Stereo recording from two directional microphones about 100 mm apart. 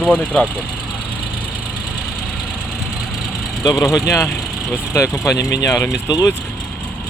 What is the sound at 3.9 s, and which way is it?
Speech, 30° left (ahead or behind).